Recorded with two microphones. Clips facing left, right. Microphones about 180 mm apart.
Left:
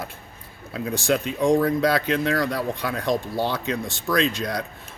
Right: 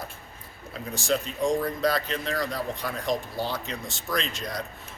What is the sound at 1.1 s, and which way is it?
Speech, 60° left (ahead or behind).